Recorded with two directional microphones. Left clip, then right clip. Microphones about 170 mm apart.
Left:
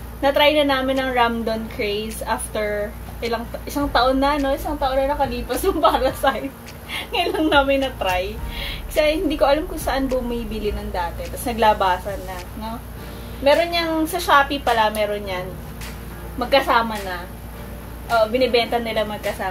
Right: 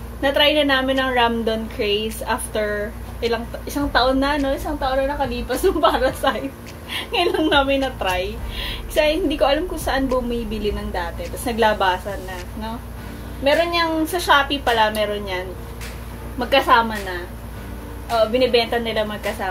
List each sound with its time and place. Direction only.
0.2 s a woman's voice: 20° right (ahead or behind)
3.2 s a woman's voice: 20° right (ahead or behind)
13.4 s a woman's voice: 20° right (ahead or behind)
18.1 s a woman's voice: 20° right (ahead or behind)